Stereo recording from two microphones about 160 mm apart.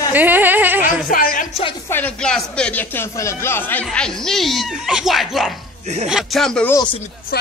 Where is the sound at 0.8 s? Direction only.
60° left (ahead or behind).